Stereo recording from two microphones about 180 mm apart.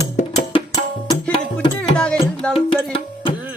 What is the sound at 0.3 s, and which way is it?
Music, 20° left (ahead or behind).